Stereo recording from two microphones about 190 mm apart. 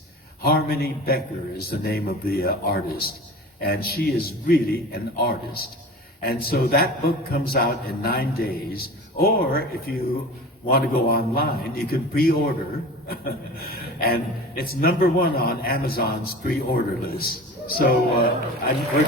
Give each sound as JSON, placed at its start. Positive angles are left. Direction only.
{"t": 0.4, "sound": "a man's voice", "side_deg": 55}